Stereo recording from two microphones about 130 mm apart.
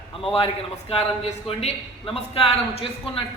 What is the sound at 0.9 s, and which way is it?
Speech, 50° left (ahead or behind).